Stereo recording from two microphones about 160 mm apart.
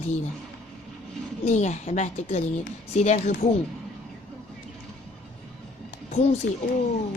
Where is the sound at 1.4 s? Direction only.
45° left (ahead or behind).